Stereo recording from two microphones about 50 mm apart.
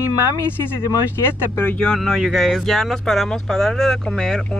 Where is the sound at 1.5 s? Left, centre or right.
Left.